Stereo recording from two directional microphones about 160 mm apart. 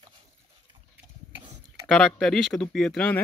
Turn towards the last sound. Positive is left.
turn(degrees=5)  # may be behind; listen again after turning